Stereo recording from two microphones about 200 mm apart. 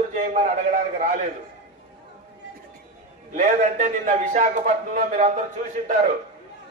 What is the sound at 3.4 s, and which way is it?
A man's voice, 40° right (ahead or behind).